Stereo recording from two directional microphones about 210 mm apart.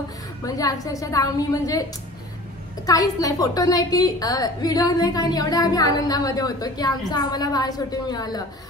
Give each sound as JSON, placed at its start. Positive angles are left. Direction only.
{"t": 0.5, "sound": "a woman's voice", "side_deg": 15}
{"t": 2.9, "sound": "a woman's voice", "side_deg": 15}